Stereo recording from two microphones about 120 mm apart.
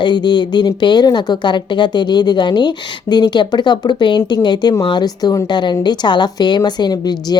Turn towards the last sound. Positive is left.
turn(degrees=35)  # may be behind; listen again after turning